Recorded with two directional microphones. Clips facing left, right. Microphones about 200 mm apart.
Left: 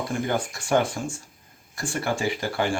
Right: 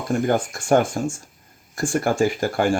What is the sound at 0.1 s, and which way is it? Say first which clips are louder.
Speech: right 10 dB; 45° right (ahead or behind).